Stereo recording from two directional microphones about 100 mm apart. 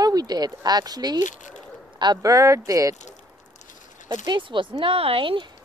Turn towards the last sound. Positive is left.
turn(degrees=-60)  # may be behind; listen again after turning